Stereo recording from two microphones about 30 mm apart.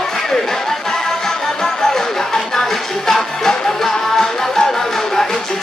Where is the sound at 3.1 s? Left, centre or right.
Centre.